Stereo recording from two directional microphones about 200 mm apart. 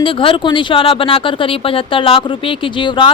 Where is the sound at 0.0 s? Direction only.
25° left (ahead or behind).